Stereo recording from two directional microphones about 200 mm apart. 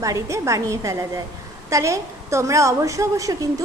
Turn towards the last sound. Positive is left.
turn(degrees=-15)  # may be behind; listen again after turning